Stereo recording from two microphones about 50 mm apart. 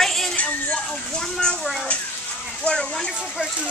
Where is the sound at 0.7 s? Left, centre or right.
Centre.